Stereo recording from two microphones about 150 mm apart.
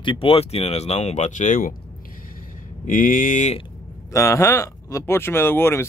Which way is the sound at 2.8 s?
60° left (ahead or behind).